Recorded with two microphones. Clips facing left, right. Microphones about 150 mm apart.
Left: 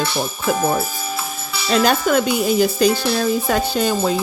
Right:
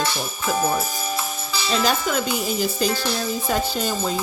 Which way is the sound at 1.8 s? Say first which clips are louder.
Left 7 dB; 60° left (ahead or behind).